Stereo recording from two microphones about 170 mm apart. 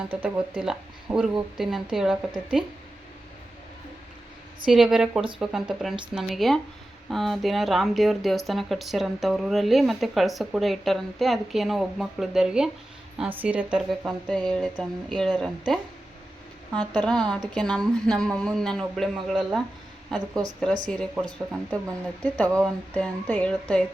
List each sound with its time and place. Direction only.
0.1 s speech: 10° right (ahead or behind)
4.6 s speech: 5° right (ahead or behind)